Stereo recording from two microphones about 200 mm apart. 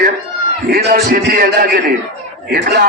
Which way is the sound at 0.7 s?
45° right (ahead or behind).